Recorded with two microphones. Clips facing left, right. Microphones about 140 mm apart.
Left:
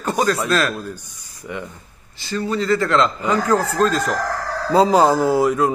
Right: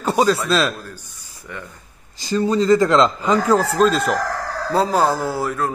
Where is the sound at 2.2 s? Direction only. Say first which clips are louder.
Right 4 dB; 20° right (ahead or behind).